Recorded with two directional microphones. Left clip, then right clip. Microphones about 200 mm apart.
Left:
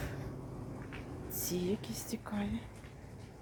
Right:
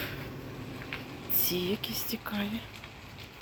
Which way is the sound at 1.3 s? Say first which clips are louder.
Right 7 dB; 50° left (ahead or behind).